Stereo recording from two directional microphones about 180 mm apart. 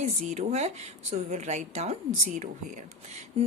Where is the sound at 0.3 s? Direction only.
40° right (ahead or behind).